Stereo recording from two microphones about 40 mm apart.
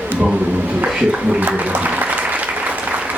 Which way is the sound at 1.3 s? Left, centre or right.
Right.